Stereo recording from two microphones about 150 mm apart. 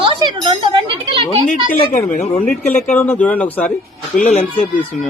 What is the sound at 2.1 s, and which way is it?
Speech, 45° left (ahead or behind).